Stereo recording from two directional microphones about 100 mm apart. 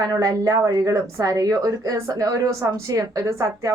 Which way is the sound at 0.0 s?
35° right (ahead or behind).